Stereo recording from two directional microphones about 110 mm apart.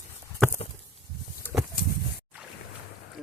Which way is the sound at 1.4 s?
20° left (ahead or behind).